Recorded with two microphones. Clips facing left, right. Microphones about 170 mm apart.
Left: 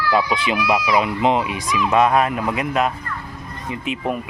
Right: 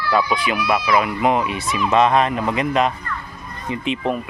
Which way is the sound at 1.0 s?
20° left (ahead or behind).